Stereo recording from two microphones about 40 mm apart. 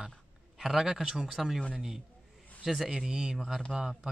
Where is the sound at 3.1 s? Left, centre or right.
Centre.